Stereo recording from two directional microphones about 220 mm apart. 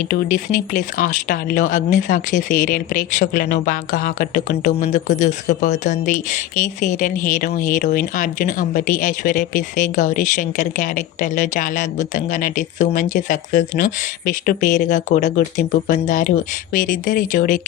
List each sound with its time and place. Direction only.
0.1 s speech: 40° left (ahead or behind)